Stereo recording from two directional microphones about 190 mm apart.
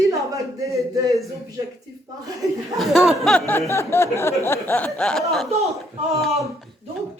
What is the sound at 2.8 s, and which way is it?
Speech, centre (ahead or behind).